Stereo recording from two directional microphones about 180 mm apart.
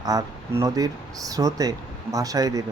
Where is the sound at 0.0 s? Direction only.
20° right (ahead or behind).